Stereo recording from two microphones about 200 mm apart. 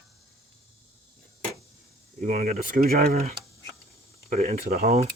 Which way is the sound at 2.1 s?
45° right (ahead or behind).